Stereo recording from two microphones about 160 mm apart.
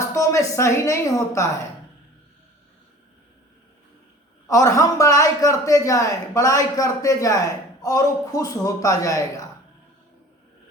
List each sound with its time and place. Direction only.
0.0 s speech: 20° left (ahead or behind)
4.4 s a man's voice: 20° left (ahead or behind)